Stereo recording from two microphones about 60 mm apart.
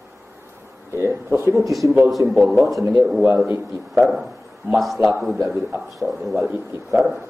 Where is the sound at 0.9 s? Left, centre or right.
Right.